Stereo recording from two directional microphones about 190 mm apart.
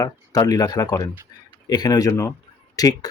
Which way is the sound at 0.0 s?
20° left (ahead or behind).